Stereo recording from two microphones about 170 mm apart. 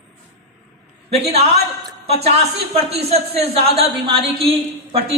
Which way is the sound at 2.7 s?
35° right (ahead or behind).